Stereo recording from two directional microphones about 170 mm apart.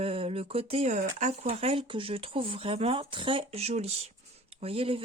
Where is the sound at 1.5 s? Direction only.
35° right (ahead or behind).